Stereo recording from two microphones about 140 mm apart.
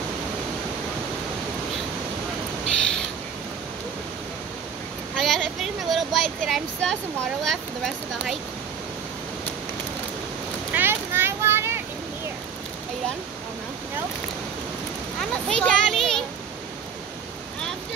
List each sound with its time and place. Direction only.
5.1 s a sound: 5° left (ahead or behind)
7.4 s speech: centre (ahead or behind)
10.7 s vehicle: 15° right (ahead or behind)
15.1 s children playing: 5° left (ahead or behind)